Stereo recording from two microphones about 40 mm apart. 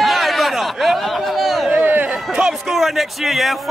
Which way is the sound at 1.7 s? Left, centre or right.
Right.